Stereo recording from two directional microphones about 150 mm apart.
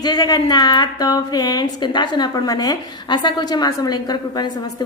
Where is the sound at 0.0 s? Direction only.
25° left (ahead or behind).